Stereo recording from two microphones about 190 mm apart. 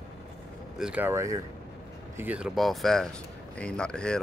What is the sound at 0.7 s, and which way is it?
Speech, 5° right (ahead or behind).